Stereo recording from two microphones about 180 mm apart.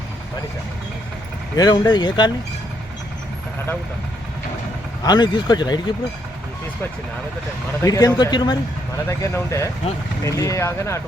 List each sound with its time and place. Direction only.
1.5 s speech: 20° left (ahead or behind)
5.0 s speech: 25° left (ahead or behind)
7.8 s speech: 20° left (ahead or behind)